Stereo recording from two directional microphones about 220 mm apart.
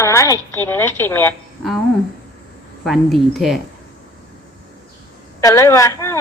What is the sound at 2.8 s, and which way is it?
Speech, centre (ahead or behind).